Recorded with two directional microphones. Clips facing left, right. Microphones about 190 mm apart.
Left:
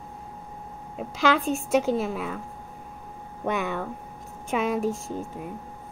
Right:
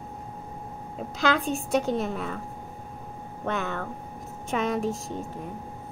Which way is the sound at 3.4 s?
10° left (ahead or behind).